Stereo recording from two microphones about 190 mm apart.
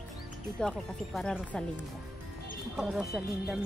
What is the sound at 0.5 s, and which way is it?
Speech, 5° left (ahead or behind).